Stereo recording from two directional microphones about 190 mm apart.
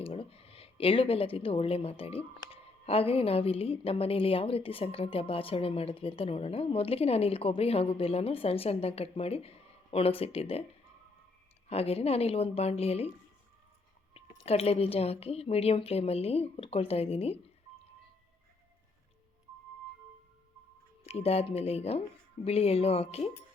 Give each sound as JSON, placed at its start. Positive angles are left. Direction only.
{"t": 0.0, "sound": "a woman's voice", "side_deg": 30}
{"t": 11.7, "sound": "a woman's voice", "side_deg": 30}
{"t": 14.1, "sound": "a woman's voice", "side_deg": 30}
{"t": 21.0, "sound": "a woman's voice", "side_deg": 30}